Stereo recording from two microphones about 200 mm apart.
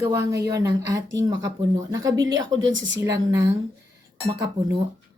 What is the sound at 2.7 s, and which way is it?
Speech, 70° right (ahead or behind).